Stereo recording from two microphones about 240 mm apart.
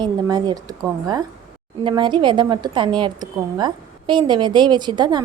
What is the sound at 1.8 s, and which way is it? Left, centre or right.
A woman's voice, centre.